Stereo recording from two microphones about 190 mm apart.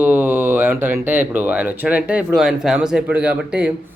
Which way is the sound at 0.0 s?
10° right (ahead or behind).